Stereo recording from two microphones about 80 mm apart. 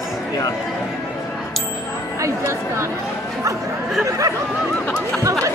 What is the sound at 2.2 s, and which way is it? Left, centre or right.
Speech, right.